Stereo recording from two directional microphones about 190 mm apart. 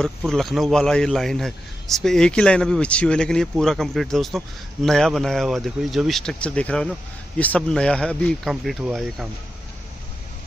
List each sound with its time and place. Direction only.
0.0 s speech: centre (ahead or behind)